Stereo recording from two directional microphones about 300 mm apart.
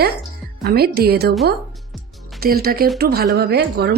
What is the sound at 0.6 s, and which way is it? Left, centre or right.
Speech, right.